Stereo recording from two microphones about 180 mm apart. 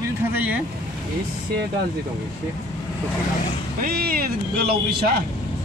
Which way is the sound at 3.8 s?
55° right (ahead or behind).